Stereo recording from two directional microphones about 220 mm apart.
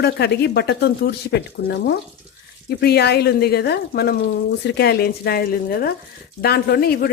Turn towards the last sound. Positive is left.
turn(degrees=45)  # may be behind; listen again after turning